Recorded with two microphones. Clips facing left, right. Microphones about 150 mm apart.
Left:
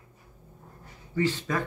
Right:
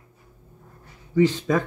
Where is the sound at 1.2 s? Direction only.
15° right (ahead or behind).